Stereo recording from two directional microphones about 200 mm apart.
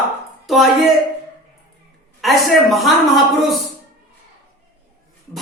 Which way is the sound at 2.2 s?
Centre (ahead or behind).